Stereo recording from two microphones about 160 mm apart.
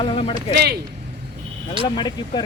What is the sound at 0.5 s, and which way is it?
Speech, 80° right.